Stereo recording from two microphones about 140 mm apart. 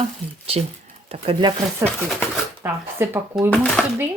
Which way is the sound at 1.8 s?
10° left (ahead or behind).